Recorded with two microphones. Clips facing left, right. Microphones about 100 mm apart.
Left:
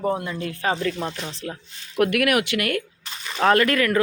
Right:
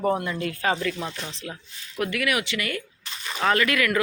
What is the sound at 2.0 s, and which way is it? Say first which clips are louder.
Speech: left 6 dB; 60° left (ahead or behind).